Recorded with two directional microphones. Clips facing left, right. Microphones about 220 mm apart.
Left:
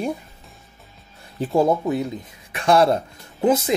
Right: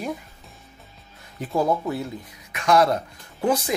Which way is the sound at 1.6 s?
20° left (ahead or behind).